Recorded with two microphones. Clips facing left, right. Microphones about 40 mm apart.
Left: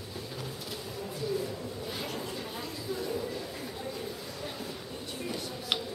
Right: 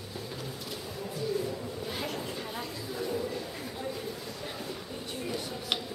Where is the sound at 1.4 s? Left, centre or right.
Centre.